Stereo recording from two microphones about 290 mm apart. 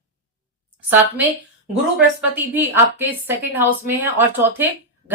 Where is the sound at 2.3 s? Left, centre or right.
Centre.